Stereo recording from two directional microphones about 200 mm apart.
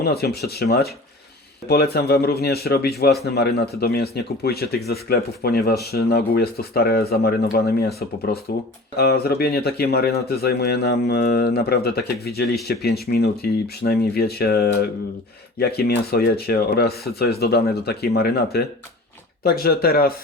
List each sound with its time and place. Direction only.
0.0 s speech: 50° left (ahead or behind)